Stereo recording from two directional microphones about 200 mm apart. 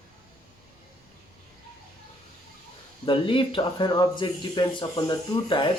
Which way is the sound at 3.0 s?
25° left (ahead or behind).